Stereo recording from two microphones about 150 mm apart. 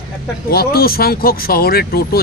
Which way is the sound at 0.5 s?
90° left.